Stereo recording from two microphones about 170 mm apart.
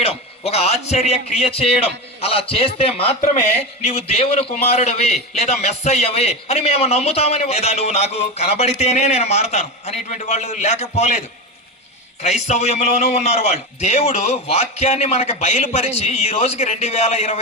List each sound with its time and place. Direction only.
0.0 s a man's voice: 35° left (ahead or behind)
12.2 s a man's voice: 40° left (ahead or behind)